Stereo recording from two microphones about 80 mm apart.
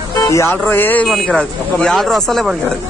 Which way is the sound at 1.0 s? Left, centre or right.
Centre.